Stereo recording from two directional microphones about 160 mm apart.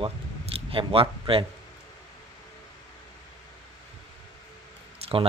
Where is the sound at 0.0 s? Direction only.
35° right (ahead or behind).